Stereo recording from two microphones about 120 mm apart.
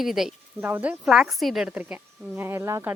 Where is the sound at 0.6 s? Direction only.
15° right (ahead or behind).